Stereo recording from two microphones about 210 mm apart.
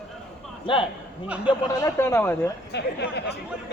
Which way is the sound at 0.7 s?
20° left (ahead or behind).